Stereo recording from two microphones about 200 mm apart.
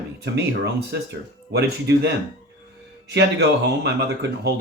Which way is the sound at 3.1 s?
55° right (ahead or behind).